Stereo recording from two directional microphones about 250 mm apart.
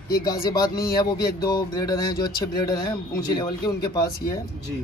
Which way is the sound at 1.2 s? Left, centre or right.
Left.